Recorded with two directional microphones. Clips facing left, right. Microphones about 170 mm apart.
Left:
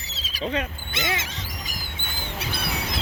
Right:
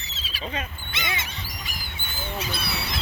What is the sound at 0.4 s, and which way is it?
Speech, 70° left (ahead or behind).